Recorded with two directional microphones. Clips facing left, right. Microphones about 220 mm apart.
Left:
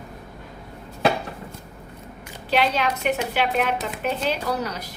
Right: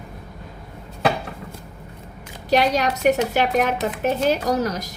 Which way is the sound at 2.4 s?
40° right (ahead or behind).